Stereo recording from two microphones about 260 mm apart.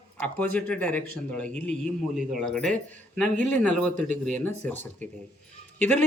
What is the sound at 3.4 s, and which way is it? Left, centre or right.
Speech, left.